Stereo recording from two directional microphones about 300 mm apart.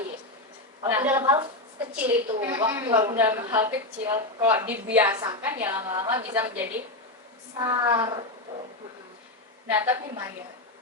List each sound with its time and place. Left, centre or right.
0.9 s a woman's voice: centre
9.6 s a woman's voice: centre